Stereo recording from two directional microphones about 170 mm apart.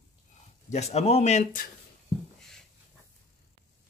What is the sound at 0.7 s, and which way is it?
Speech, 40° left (ahead or behind).